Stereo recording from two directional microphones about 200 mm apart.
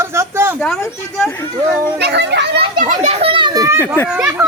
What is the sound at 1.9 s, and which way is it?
Speech, 55° right (ahead or behind).